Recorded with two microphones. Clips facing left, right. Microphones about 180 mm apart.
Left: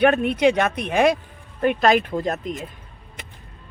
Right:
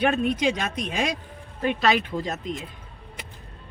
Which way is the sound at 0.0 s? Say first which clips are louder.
Left 5 dB; 65° left (ahead or behind).